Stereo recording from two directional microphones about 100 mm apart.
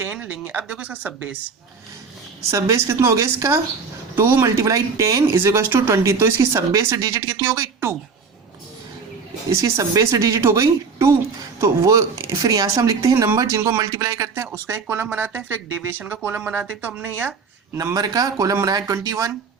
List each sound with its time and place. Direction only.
0.0 s speech: 15° right (ahead or behind)
2.5 s speech: 35° right (ahead or behind)
9.5 s speech: 35° right (ahead or behind)
14.7 s speech: 20° right (ahead or behind)
17.9 s speech: 40° right (ahead or behind)